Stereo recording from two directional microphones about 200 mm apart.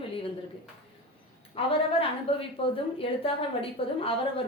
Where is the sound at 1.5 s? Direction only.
25° left (ahead or behind).